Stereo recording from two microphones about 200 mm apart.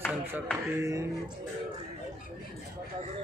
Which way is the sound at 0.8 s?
15° right (ahead or behind).